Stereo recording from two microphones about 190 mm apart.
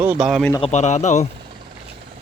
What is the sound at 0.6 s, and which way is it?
Speech, 35° left (ahead or behind).